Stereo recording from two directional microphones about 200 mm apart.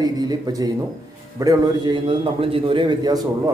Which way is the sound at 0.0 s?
20° right (ahead or behind).